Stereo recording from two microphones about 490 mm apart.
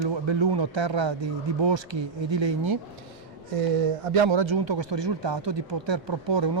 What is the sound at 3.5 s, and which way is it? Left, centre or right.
A man's voice, right.